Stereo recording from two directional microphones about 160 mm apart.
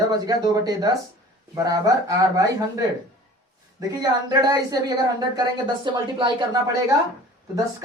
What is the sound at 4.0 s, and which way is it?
Speech, 25° right (ahead or behind).